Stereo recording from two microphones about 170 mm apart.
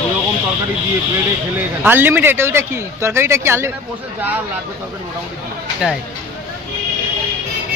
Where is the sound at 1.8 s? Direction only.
10° right (ahead or behind).